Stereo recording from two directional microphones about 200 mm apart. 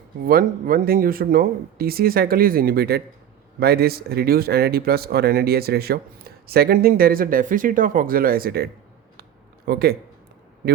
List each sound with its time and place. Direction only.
0.3 s speech: 45° right (ahead or behind)